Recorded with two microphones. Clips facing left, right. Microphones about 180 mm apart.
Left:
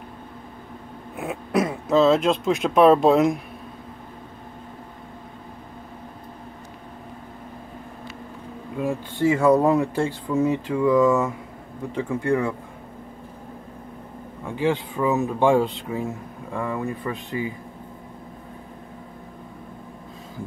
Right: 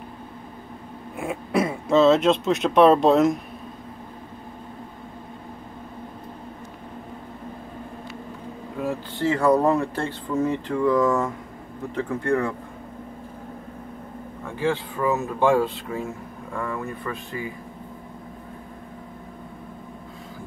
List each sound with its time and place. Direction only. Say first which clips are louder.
1.1 s a sound: right 1 dB; 5° left (ahead or behind)
1.5 s speech: even; 5° right (ahead or behind)
8.8 s speech: left 3 dB; 10° left (ahead or behind)
14.4 s speech: left 2 dB; 15° left (ahead or behind)